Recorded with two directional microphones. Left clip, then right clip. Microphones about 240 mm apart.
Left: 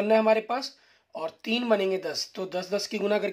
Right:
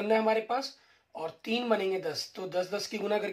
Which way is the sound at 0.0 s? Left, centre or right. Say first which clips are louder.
Left 5 dB; left.